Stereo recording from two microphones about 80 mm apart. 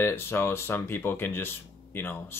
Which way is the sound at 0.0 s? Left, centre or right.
Left.